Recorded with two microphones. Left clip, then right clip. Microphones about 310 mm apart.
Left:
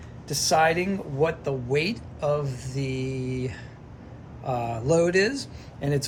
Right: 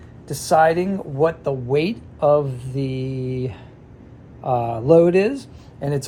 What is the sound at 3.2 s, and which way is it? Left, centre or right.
Speech, centre.